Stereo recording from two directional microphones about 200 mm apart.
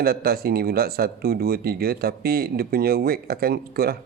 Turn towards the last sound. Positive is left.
turn(degrees=-50)  # may be behind; listen again after turning